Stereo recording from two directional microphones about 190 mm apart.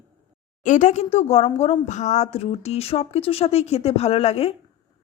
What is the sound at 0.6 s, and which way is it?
A woman's voice, 40° left (ahead or behind).